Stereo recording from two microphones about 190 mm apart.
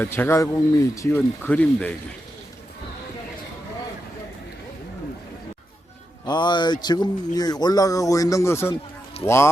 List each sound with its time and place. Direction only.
0.0 s speech: 10° left (ahead or behind)
6.2 s speech: 25° left (ahead or behind)